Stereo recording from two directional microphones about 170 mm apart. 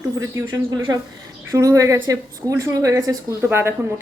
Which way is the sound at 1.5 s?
20° right (ahead or behind).